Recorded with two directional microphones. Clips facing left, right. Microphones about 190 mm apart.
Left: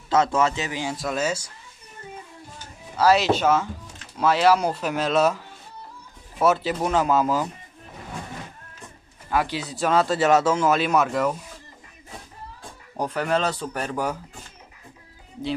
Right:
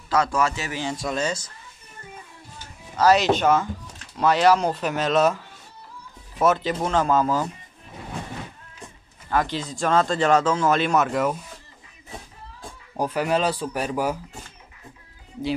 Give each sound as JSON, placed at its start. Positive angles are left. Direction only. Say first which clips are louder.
{"t": 0.1, "sound": "a man's voice", "louder": "left 2 dB", "side_deg": 25}
{"t": 0.9, "sound": "speech", "louder": "left 1 dB", "side_deg": 5}
{"t": 3.0, "sound": "speech", "louder": "right 1 dB", "side_deg": 5}
{"t": 6.4, "sound": "speech", "louder": "even", "side_deg": 5}
{"t": 9.3, "sound": "speech", "louder": "right 1 dB", "side_deg": 10}
{"t": 12.9, "sound": "speech", "louder": "right 1 dB", "side_deg": -10}